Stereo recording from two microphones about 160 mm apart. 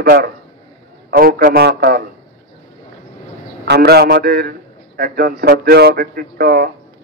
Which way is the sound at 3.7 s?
90° right.